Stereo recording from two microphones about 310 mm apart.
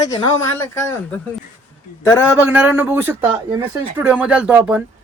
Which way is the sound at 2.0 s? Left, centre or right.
Centre.